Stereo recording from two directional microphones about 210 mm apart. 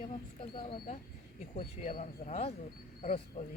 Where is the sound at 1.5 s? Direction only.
40° left (ahead or behind).